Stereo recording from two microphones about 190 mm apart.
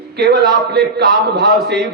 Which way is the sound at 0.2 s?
60° right (ahead or behind).